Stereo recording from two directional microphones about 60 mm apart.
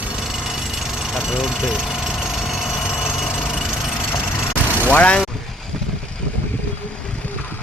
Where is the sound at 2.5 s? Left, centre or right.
Centre.